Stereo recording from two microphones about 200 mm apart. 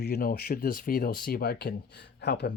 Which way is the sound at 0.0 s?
50° left (ahead or behind).